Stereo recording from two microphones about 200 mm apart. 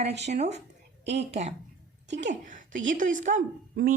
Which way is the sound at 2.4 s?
40° right (ahead or behind).